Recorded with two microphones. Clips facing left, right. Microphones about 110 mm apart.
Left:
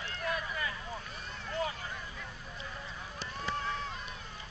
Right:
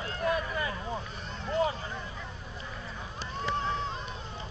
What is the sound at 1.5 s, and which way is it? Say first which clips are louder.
Vehicle: right 7 dB; 30° right (ahead or behind).